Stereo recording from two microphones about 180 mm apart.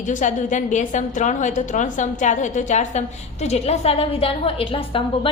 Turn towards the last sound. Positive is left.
turn(degrees=30)  # may be behind; listen again after turning